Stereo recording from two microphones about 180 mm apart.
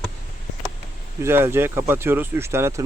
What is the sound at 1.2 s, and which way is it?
Speech, 15° right (ahead or behind).